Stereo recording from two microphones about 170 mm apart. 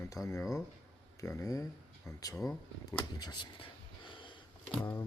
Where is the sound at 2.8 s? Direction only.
20° left (ahead or behind).